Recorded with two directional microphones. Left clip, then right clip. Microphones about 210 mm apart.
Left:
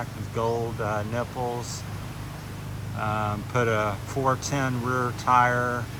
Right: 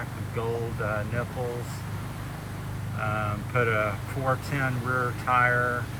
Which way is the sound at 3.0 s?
15° left (ahead or behind).